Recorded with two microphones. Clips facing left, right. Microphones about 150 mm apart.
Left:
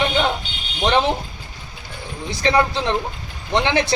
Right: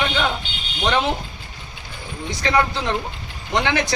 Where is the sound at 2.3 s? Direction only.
30° left (ahead or behind).